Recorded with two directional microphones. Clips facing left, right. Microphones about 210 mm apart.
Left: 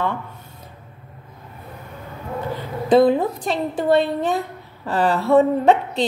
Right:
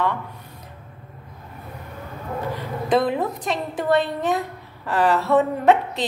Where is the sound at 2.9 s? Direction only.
30° left (ahead or behind).